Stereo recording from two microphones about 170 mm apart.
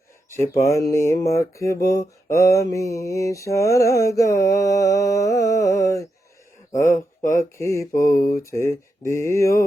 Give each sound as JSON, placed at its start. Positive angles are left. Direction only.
{"t": 0.3, "sound": "speech", "side_deg": 15}
{"t": 1.9, "sound": "mantra", "side_deg": 20}
{"t": 6.9, "sound": "speech", "side_deg": 50}
{"t": 7.3, "sound": "speech", "side_deg": 15}